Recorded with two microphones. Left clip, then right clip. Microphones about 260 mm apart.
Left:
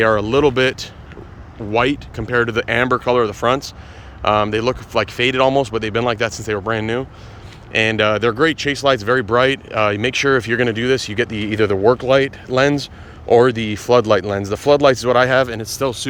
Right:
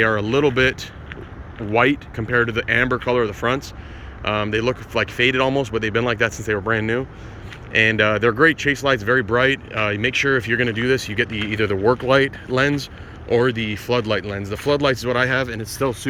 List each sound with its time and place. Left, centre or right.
0.0 s speech: centre